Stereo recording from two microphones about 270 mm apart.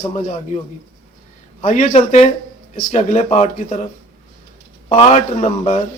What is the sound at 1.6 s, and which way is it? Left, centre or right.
A man's voice, left.